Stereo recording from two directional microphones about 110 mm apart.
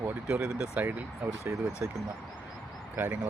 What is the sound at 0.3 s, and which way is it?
Speech, 10° right (ahead or behind).